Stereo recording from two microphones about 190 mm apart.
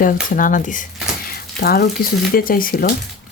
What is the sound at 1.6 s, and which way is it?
Speech, 55° left (ahead or behind).